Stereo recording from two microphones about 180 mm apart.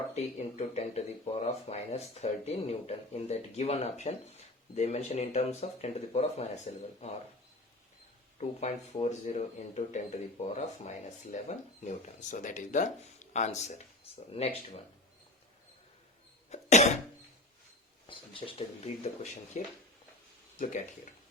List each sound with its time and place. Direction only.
0.1 s speech: 40° left (ahead or behind)
8.4 s speech: 40° left (ahead or behind)
16.5 s cough: 40° left (ahead or behind)
18.0 s speech: 30° left (ahead or behind)